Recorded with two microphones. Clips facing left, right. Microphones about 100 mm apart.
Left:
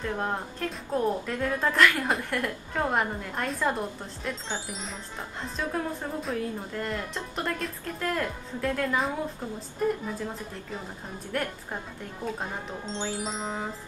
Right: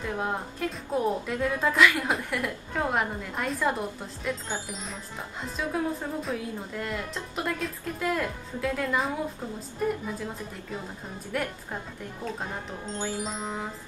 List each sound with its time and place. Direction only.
0.0 s speech: 5° right (ahead or behind)
11.3 s speech: 5° right (ahead or behind)
12.8 s music: 20° left (ahead or behind)
13.2 s speech: 5° right (ahead or behind)